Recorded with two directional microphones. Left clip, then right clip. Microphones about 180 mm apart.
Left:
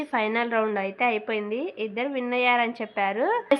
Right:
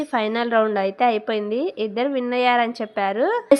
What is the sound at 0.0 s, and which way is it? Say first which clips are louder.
A woman's voice: right 3 dB; 30° right (ahead or behind).